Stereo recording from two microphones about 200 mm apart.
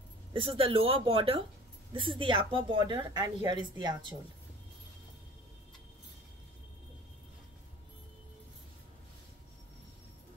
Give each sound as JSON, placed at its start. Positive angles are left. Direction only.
{"t": 0.3, "sound": "a woman's voice", "side_deg": -25}